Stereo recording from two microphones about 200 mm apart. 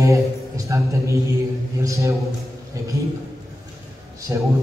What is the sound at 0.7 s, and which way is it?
Speech, 15° right (ahead or behind).